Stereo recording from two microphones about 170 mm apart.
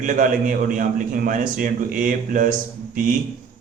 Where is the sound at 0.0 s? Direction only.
50° right (ahead or behind).